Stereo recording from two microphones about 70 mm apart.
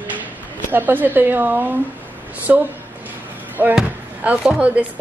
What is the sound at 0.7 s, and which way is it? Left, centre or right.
A woman's voice, right.